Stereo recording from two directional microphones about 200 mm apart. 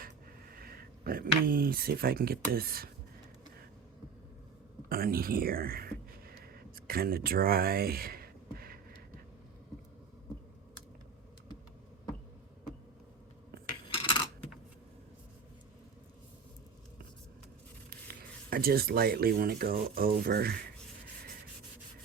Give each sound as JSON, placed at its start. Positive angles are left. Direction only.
{"t": 0.5, "sound": "speech", "side_deg": -50}
{"t": 4.9, "sound": "a sound", "side_deg": -45}
{"t": 13.8, "sound": "coin", "side_deg": 25}
{"t": 18.1, "sound": "speech", "side_deg": -50}